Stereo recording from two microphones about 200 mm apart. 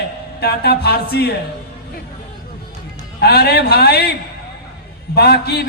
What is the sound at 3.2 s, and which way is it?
Speech, 55° left (ahead or behind).